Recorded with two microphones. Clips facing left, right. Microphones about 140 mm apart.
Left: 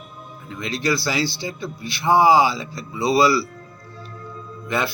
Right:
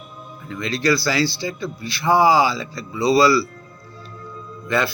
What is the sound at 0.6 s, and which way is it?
Speech, 15° left (ahead or behind).